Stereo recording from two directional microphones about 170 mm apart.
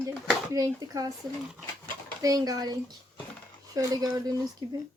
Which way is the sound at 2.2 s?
20° right (ahead or behind).